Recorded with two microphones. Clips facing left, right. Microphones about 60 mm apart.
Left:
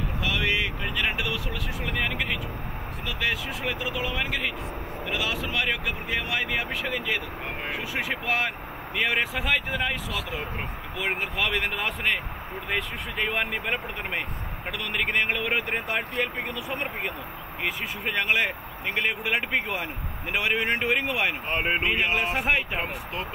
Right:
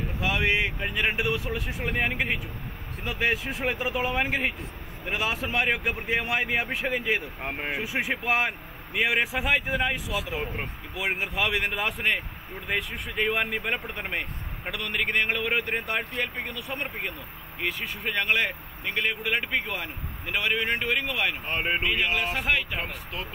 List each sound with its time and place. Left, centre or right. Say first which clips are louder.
0.2 s a man's voice: right 2 dB; right; by 23.2 s left